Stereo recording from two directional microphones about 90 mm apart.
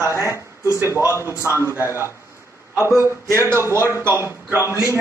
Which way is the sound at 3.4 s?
30° right (ahead or behind).